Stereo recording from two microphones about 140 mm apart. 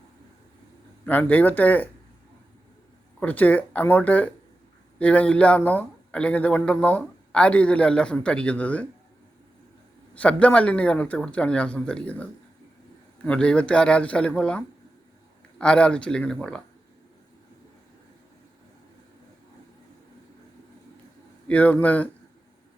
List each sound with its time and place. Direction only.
1.0 s speech: 10° left (ahead or behind)
3.2 s speech: 10° left (ahead or behind)
10.2 s speech: 10° left (ahead or behind)
21.4 s speech: 10° left (ahead or behind)